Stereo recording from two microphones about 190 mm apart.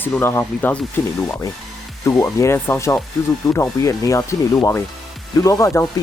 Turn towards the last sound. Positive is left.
turn(degrees=15)  # may be behind; listen again after turning